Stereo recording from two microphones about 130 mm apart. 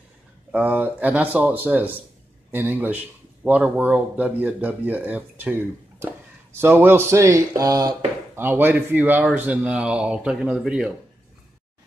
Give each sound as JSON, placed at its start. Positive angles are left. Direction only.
{"t": 0.5, "sound": "speech", "side_deg": -10}
{"t": 8.4, "sound": "speech", "side_deg": -15}